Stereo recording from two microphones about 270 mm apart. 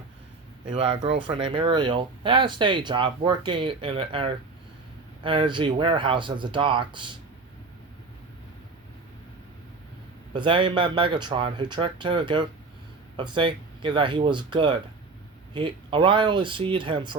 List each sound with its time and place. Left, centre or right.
0.7 s speech: right
10.3 s speech: centre